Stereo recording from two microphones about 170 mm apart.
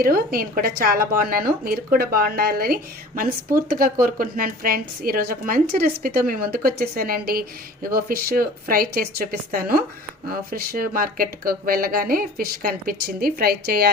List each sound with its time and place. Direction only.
0.0 s a woman's voice: 60° right (ahead or behind)